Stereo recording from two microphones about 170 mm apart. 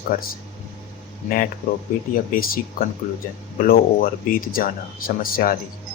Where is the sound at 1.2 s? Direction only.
55° left (ahead or behind).